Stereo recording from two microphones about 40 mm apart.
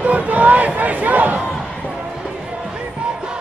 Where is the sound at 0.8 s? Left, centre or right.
Right.